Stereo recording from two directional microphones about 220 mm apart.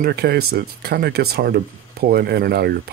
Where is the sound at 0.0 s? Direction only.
45° right (ahead or behind).